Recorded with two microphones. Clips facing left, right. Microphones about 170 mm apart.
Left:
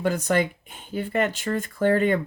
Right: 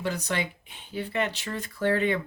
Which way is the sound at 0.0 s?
50° left (ahead or behind).